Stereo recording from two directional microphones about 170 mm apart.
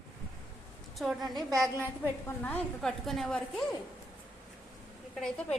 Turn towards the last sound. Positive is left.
turn(degrees=5)  # may be behind; listen again after turning